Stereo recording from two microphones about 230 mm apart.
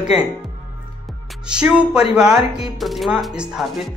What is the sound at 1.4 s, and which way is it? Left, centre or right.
Speech, centre.